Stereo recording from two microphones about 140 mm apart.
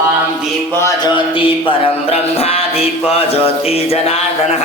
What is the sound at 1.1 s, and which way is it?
Music, 40° left (ahead or behind).